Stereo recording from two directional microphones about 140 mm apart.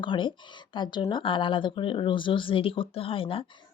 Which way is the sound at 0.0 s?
35° left (ahead or behind).